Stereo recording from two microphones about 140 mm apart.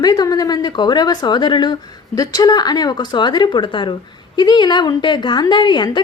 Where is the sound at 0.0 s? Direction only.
25° left (ahead or behind).